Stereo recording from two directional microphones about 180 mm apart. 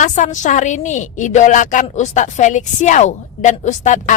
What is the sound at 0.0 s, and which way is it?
A woman's voice, 45° left (ahead or behind).